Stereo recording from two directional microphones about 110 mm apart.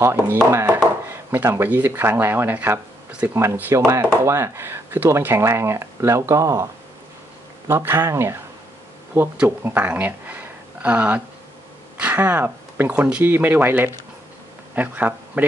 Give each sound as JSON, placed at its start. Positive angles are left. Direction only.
{"t": 0.0, "sound": "speech", "side_deg": -20}
{"t": 9.4, "sound": "speech", "side_deg": -15}